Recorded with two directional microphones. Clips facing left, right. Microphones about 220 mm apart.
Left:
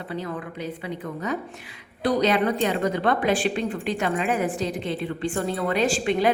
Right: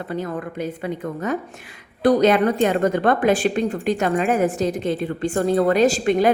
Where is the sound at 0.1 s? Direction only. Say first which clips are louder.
Right 4 dB; 45° right (ahead or behind).